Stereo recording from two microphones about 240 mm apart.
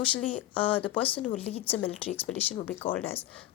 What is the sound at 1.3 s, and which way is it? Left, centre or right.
Speech, left.